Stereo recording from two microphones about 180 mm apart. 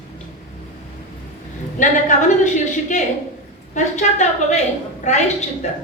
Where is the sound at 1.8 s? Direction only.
45° left (ahead or behind).